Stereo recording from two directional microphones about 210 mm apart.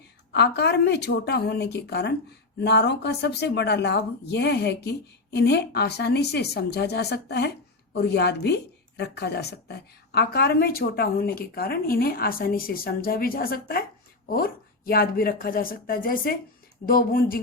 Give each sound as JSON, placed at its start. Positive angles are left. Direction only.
{"t": 0.3, "sound": "a woman's voice", "side_deg": 55}